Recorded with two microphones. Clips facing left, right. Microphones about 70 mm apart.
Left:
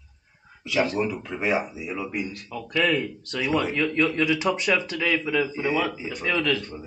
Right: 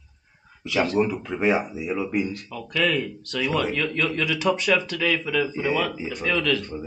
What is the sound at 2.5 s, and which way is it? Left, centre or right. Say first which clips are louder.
Speech: left 1 dB; centre.